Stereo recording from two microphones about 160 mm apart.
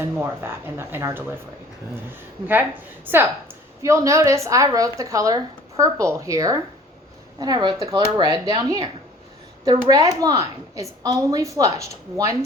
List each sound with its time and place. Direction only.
0.0 s speech: 15° right (ahead or behind)
3.1 s speech: 10° right (ahead or behind)